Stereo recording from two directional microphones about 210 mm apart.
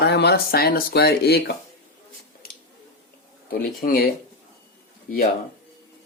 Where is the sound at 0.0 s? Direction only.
50° left (ahead or behind).